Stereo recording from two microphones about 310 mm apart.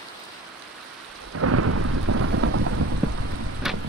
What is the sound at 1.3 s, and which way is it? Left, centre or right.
Thunder, right.